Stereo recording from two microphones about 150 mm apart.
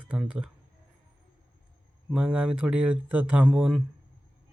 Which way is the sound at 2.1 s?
5° right (ahead or behind).